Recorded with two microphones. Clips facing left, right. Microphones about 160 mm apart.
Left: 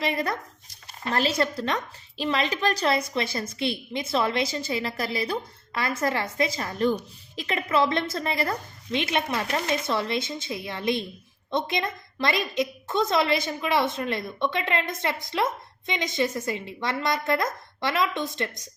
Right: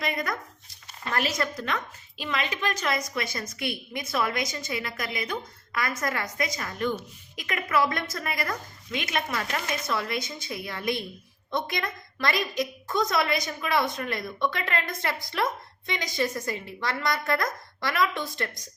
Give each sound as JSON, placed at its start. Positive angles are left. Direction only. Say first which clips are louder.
{"t": 0.0, "sound": "a woman's voice", "louder": "left 3 dB", "side_deg": 30}